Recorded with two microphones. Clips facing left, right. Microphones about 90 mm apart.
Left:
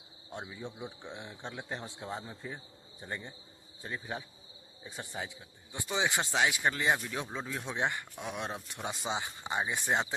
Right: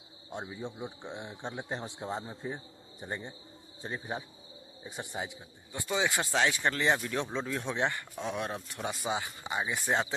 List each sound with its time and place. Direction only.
0.3 s speech: 20° right (ahead or behind)
5.7 s speech: 20° left (ahead or behind)
7.7 s speech: 15° left (ahead or behind)